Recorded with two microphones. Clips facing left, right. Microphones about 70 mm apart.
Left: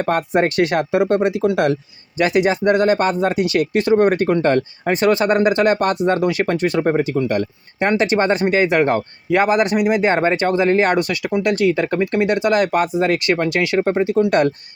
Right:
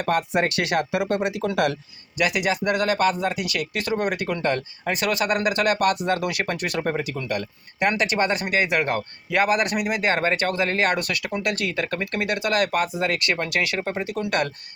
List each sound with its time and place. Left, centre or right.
0.0 s speech: left